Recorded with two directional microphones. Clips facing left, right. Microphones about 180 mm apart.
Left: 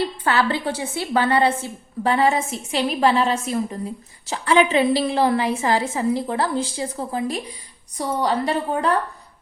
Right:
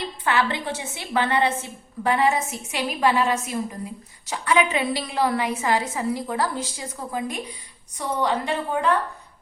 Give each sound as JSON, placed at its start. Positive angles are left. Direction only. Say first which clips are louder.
{"t": 0.3, "sound": "a woman's voice", "louder": "left 1 dB", "side_deg": 35}